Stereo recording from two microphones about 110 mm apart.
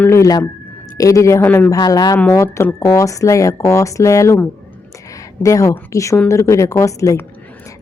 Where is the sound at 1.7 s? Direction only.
35° left (ahead or behind).